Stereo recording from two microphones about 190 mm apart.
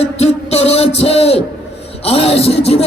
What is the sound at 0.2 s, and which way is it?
Music, 35° left (ahead or behind).